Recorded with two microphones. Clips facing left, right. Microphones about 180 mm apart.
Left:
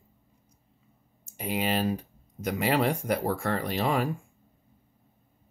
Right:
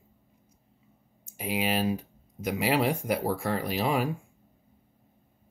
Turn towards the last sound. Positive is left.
turn(degrees=-5)  # may be behind; listen again after turning